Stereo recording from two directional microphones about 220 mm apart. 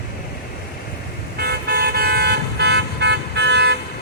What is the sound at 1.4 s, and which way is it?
Vehicle, 45° right (ahead or behind).